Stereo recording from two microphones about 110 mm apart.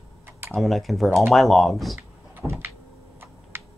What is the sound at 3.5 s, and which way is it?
Computer keyboard, 20° right (ahead or behind).